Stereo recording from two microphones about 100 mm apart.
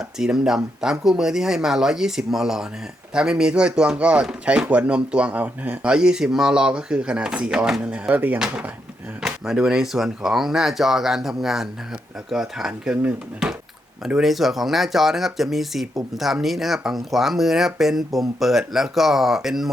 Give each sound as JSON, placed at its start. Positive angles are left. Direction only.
{"t": 0.2, "sound": "speech", "side_deg": -5}
{"t": 9.2, "sound": "speech", "side_deg": -5}